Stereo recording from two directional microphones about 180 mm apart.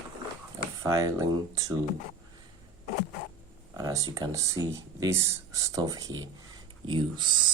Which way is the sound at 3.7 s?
20° right (ahead or behind).